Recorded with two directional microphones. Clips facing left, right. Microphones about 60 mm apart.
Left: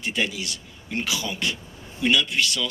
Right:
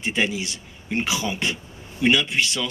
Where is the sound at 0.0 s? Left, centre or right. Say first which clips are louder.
Right 3 dB; right.